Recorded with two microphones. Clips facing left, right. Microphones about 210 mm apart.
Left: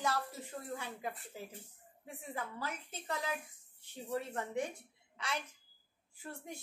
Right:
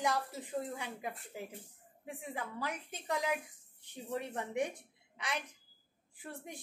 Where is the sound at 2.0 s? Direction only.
15° right (ahead or behind).